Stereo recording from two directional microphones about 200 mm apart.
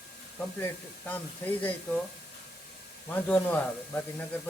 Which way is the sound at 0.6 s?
10° left (ahead or behind).